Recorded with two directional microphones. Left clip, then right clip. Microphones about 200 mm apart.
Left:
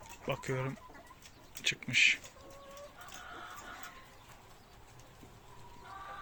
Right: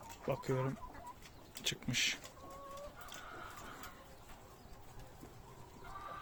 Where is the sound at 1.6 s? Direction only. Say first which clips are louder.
Left 9 dB; 15° right (ahead or behind).